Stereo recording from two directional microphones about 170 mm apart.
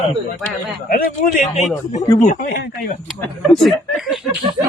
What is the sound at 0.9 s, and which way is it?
A man's voice, 50° left (ahead or behind).